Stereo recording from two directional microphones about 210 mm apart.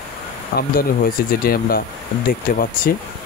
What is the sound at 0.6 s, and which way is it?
Speech, 45° left (ahead or behind).